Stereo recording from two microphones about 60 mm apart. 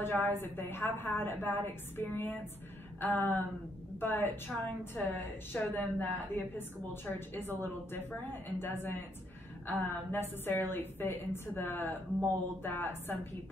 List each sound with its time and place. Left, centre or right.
0.0 s a woman's voice: left